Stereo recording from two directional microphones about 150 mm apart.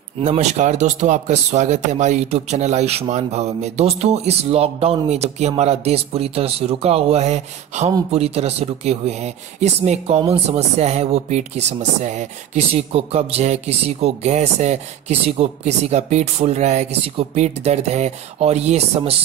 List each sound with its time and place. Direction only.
0.2 s speech: 50° right (ahead or behind)